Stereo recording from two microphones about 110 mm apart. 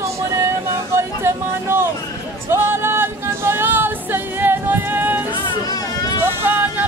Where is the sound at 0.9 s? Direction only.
25° right (ahead or behind).